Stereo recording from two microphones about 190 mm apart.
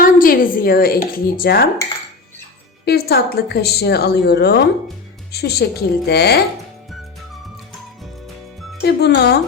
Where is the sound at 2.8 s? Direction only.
55° left (ahead or behind).